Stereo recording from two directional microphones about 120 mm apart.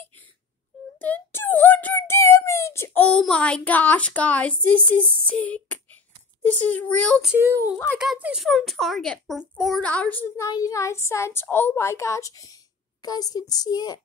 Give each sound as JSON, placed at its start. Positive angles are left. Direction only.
{"t": 0.9, "sound": "a sound", "side_deg": 15}
{"t": 3.2, "sound": "a woman's voice", "side_deg": 5}
{"t": 5.2, "sound": "a sound", "side_deg": 10}
{"t": 6.4, "sound": "a woman's voice", "side_deg": 15}
{"t": 7.3, "sound": "speech", "side_deg": -20}
{"t": 8.0, "sound": "speech", "side_deg": -5}
{"t": 9.8, "sound": "a woman's voice", "side_deg": 10}
{"t": 10.4, "sound": "a woman's voice", "side_deg": 30}